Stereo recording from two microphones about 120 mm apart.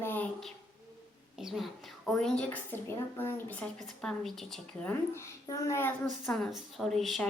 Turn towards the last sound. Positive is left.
turn(degrees=0)  # may be behind; listen again after turning